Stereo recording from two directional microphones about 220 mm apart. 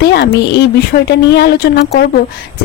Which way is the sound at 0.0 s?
50° left (ahead or behind).